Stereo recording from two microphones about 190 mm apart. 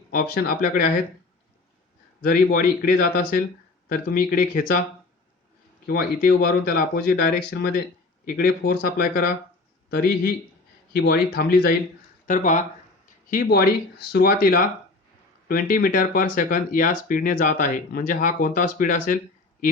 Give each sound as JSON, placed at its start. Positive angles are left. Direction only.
{"t": 0.1, "sound": "speech", "side_deg": 50}
{"t": 2.2, "sound": "speech", "side_deg": 50}
{"t": 5.9, "sound": "speech", "side_deg": 50}